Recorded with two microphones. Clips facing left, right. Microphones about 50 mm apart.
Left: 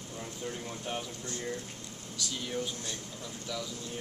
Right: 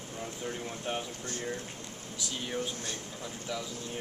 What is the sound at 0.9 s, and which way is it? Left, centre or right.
Speech, right.